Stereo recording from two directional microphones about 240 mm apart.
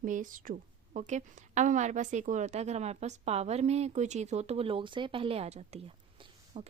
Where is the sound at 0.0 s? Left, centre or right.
Right.